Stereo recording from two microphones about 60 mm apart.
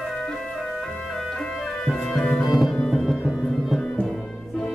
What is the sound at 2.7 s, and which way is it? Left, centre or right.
Music, centre.